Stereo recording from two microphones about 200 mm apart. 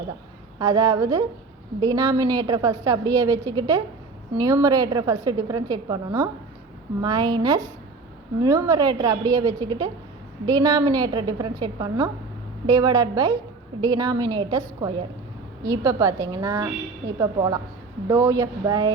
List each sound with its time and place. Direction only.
0.6 s a woman's voice: 20° right (ahead or behind)